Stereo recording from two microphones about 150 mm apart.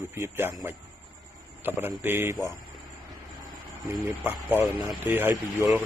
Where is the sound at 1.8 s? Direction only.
15° right (ahead or behind).